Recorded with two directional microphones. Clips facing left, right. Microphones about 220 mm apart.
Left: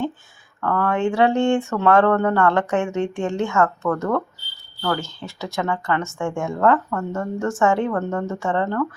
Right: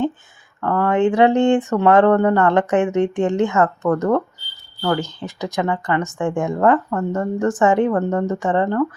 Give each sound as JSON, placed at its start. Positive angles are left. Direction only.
{"t": 0.6, "sound": "speech", "side_deg": -20}